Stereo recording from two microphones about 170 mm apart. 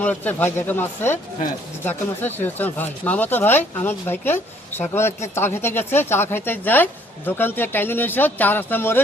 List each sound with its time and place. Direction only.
0.0 s speech: 10° left (ahead or behind)